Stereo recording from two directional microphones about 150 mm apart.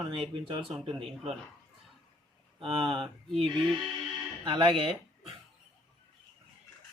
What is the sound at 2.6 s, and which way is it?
Speech, 35° right (ahead or behind).